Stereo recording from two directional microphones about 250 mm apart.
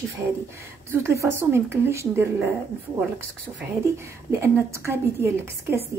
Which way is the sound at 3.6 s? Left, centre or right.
Centre.